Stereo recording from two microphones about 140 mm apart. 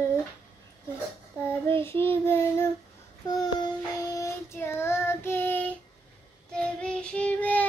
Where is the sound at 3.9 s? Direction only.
20° left (ahead or behind).